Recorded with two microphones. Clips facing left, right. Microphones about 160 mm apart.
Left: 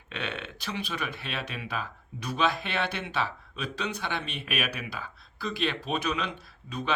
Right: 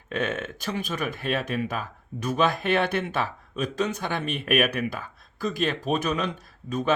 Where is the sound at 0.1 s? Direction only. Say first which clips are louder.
Right 8 dB; 45° right (ahead or behind).